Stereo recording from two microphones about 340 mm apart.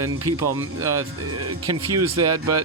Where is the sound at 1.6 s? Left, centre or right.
Right.